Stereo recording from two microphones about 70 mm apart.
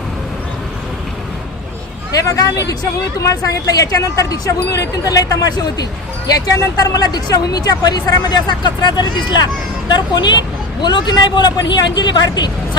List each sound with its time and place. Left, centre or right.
2.1 s speech: left